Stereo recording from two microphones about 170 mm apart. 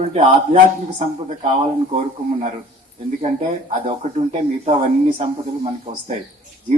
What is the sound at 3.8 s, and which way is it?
Speech, 40° right (ahead or behind).